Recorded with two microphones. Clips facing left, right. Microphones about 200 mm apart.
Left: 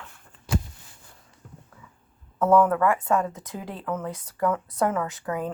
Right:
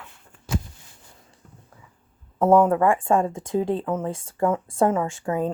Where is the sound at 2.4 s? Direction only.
25° right (ahead or behind).